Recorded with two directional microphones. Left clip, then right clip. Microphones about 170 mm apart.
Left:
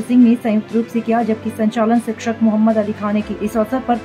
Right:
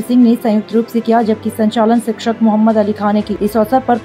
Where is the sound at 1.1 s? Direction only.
20° right (ahead or behind).